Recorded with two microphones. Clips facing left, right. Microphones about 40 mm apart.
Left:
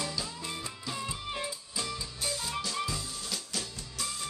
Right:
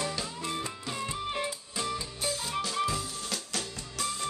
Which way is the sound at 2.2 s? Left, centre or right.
Centre.